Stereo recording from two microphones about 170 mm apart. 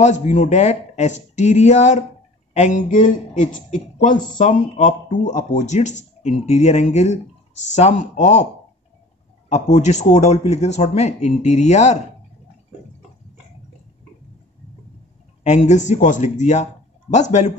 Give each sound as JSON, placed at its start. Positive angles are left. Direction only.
{"t": 0.0, "sound": "speech", "side_deg": 45}
{"t": 9.5, "sound": "speech", "side_deg": 45}
{"t": 15.4, "sound": "speech", "side_deg": 45}